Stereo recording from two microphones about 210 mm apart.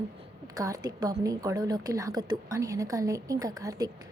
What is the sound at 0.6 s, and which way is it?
A woman's voice, 15° right (ahead or behind).